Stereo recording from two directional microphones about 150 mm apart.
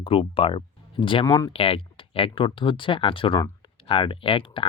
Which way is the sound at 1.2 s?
20° left (ahead or behind).